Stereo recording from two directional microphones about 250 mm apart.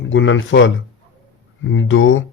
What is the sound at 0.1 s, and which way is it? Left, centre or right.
Speech, left.